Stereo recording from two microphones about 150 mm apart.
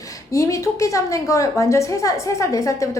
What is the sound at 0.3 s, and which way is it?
A woman's voice, 20° left (ahead or behind).